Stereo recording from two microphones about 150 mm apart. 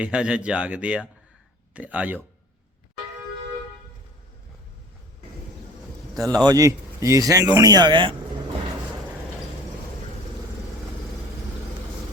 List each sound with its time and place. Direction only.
0.0 s speech: 5° right (ahead or behind)
6.1 s speech: 25° right (ahead or behind)